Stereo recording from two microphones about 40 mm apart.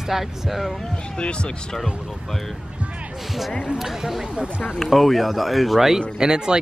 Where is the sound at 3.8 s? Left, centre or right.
Centre.